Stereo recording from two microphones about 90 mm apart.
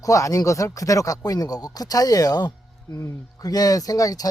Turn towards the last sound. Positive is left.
turn(degrees=40)  # may be behind; listen again after turning